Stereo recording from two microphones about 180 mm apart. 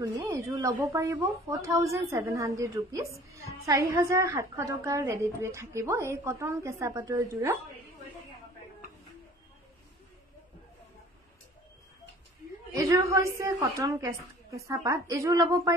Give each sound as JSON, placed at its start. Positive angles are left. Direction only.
{"t": 0.2, "sound": "a woman's voice", "side_deg": -20}
{"t": 12.7, "sound": "a woman's voice", "side_deg": -20}